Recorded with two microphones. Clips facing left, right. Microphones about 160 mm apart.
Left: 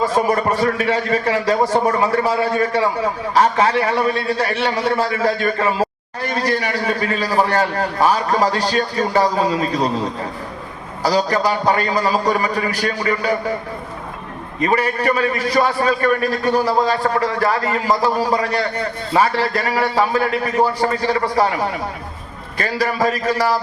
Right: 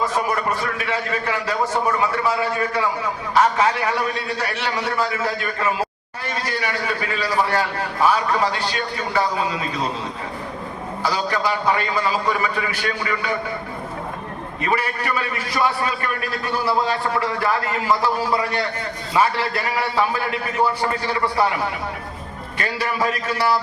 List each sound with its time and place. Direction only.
0.0 s a man's voice: 35° left (ahead or behind)
11.0 s a man's voice: 40° left (ahead or behind)
14.6 s a man's voice: 40° left (ahead or behind)